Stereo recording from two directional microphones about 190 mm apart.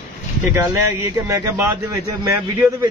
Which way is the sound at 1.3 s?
15° right (ahead or behind).